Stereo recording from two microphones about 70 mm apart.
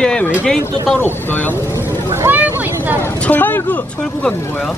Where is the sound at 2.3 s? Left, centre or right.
Right.